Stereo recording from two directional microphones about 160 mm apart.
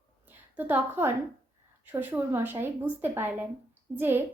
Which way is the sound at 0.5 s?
10° right (ahead or behind).